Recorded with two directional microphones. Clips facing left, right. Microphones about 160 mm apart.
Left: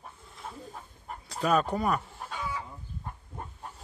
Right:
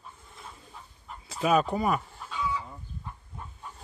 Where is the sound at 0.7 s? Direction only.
50° left (ahead or behind).